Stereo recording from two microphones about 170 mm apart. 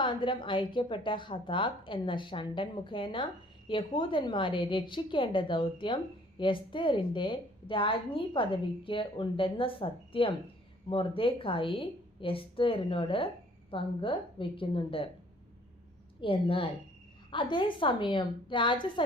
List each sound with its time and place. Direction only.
0.0 s a woman's voice: 30° left (ahead or behind)
16.2 s a woman's voice: 30° left (ahead or behind)